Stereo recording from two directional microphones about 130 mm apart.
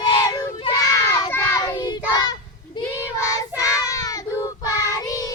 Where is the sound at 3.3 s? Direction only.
25° left (ahead or behind).